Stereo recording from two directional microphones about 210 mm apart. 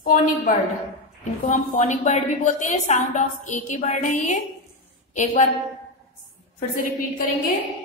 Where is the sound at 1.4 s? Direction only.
35° left (ahead or behind).